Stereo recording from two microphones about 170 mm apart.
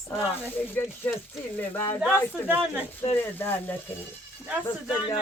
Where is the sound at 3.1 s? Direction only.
10° left (ahead or behind).